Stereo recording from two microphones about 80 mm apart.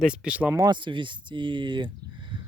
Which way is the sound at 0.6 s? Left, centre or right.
Right.